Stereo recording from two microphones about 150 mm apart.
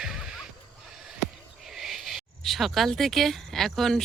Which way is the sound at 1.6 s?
Centre (ahead or behind).